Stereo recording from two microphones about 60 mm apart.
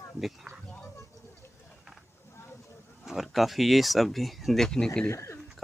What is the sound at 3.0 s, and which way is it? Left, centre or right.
Speech, centre.